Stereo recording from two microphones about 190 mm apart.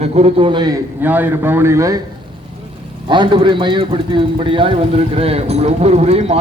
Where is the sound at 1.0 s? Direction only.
10° right (ahead or behind).